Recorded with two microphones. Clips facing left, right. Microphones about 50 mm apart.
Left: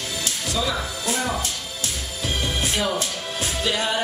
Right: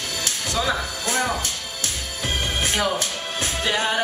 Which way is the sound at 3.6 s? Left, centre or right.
Right.